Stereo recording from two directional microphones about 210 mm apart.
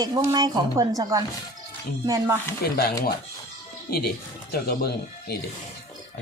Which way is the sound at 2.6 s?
45° left (ahead or behind).